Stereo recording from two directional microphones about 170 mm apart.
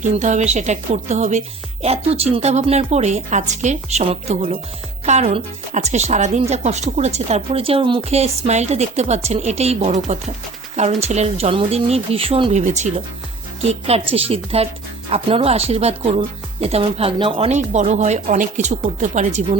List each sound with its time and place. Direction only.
0.0 s a woman's voice: 45° right (ahead or behind)